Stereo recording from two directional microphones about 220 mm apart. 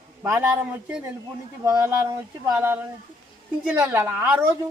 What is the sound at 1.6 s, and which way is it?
Speech, 15° right (ahead or behind).